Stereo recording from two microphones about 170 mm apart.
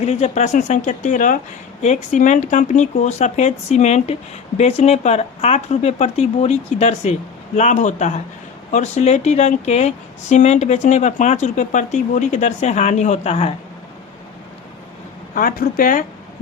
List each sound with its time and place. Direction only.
0.0 s speech: 40° left (ahead or behind)
15.4 s speech: 55° left (ahead or behind)